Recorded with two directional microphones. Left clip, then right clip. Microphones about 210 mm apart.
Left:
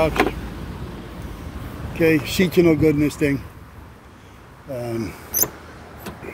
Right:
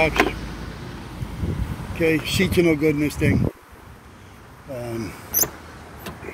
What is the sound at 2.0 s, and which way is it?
Speech, 25° left (ahead or behind).